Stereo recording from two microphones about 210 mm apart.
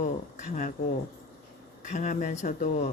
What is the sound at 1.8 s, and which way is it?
Speech, 35° left (ahead or behind).